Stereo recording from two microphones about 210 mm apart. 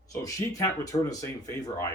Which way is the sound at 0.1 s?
15° left (ahead or behind).